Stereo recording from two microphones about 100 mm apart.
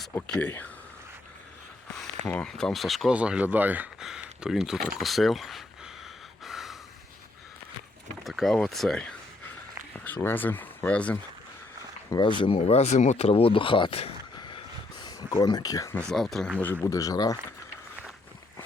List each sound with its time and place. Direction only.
0.3 s speech: 15° left (ahead or behind)
2.3 s speech: 10° left (ahead or behind)
3.1 s speech: 10° right (ahead or behind)
4.0 s speech: 5° right (ahead or behind)
6.4 s gasp: centre (ahead or behind)
8.2 s speech: centre (ahead or behind)
9.9 s a sound: 20° left (ahead or behind)
10.2 s speech: 20° left (ahead or behind)
12.2 s speech: 55° left (ahead or behind)
12.5 s speech: 90° left; by 14.1 s 65° left (ahead or behind)
15.0 s speech: 45° left (ahead or behind)
16.0 s speech: 5° left (ahead or behind)
16.8 s speech: 35° left (ahead or behind)